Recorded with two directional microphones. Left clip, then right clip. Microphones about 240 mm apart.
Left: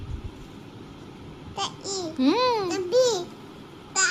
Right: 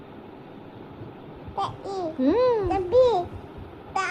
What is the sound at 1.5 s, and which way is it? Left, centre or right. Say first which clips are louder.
Speech: right 2 dB; left.